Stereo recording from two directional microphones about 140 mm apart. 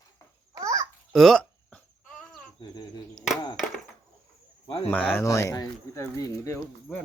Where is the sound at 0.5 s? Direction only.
25° right (ahead or behind).